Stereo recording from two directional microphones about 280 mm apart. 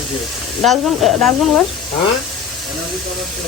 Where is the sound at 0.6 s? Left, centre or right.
Centre.